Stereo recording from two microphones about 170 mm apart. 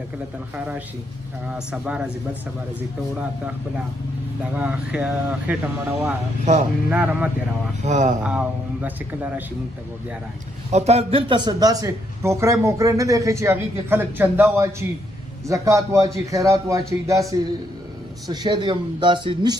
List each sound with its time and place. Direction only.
1.5 s speech: 5° right (ahead or behind)
4.6 s speech: 5° right (ahead or behind)
6.4 s speech: 40° right (ahead or behind)
6.9 s speech: 10° right (ahead or behind)
7.8 s speech: 45° right (ahead or behind)
8.2 s speech: 5° right (ahead or behind)
10.7 s a man's voice: 40° right (ahead or behind)